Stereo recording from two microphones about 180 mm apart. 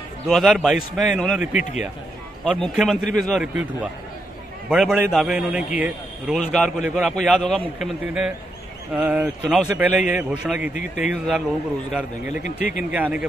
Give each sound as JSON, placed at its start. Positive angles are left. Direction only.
{"t": 0.3, "sound": "a man's voice", "side_deg": 0}
{"t": 1.6, "sound": "speech", "side_deg": 40}
{"t": 2.4, "sound": "a man's voice", "side_deg": 0}